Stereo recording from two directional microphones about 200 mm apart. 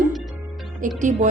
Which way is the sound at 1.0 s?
40° right (ahead or behind).